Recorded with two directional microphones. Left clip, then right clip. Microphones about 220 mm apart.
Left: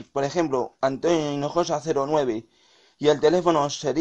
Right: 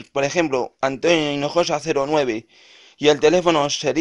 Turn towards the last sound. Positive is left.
turn(degrees=-35)  # may be behind; listen again after turning